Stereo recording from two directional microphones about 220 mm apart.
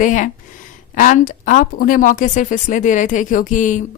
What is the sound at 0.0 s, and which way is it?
Speech, 35° left (ahead or behind).